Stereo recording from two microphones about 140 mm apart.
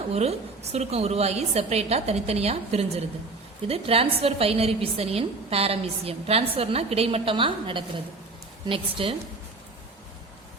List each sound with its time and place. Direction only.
0.1 s a woman's voice: 50° right (ahead or behind)